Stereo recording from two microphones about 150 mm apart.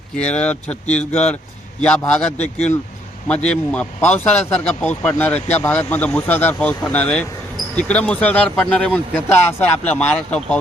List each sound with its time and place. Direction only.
0.3 s speech: 10° left (ahead or behind)
2.4 s speech: 50° left (ahead or behind)
3.2 s speech: 5° left (ahead or behind)